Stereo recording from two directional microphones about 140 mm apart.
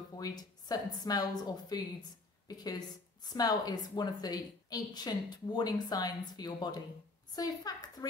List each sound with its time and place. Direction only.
0.2 s a woman's voice: 30° left (ahead or behind)